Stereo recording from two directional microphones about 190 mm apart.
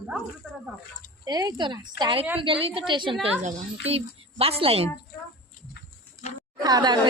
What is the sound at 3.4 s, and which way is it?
A woman's voice, 40° right (ahead or behind).